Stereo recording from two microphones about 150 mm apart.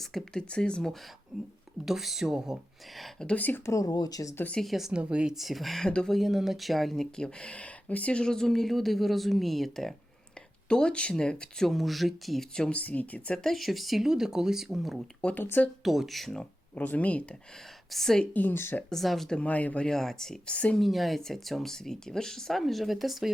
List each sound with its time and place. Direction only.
0.0 s a woman's voice: centre (ahead or behind); by 4.4 s 20° left (ahead or behind)
4.4 s a woman's voice: 5° left (ahead or behind)
15.8 s a woman's voice: centre (ahead or behind)